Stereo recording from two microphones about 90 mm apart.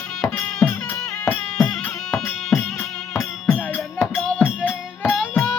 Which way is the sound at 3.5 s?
20° left (ahead or behind).